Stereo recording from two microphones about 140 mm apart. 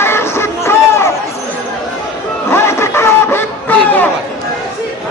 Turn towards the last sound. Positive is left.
turn(degrees=10)  # may be behind; listen again after turning